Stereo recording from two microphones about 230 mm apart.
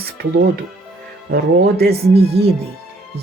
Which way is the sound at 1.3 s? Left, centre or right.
Right.